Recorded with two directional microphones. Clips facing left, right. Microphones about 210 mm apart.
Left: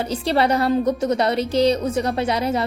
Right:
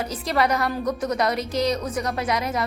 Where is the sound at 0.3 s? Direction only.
30° left (ahead or behind).